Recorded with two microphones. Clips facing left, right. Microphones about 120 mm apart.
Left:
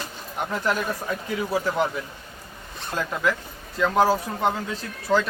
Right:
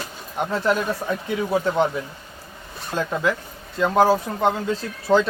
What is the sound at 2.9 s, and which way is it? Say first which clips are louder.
Speech: right 2 dB; 25° right (ahead or behind).